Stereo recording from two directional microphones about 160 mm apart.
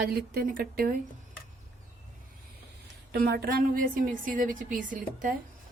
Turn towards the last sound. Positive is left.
turn(degrees=-55)  # may be behind; listen again after turning